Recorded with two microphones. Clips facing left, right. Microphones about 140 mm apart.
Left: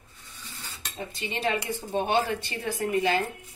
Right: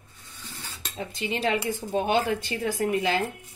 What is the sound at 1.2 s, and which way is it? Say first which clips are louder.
A woman's voice: right 2 dB; 90° right.